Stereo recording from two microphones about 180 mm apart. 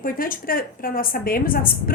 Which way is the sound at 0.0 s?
50° left (ahead or behind).